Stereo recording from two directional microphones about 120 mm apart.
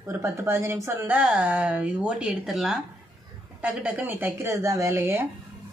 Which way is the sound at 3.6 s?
15° right (ahead or behind).